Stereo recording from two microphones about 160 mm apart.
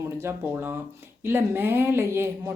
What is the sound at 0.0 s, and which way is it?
Speech, 15° right (ahead or behind).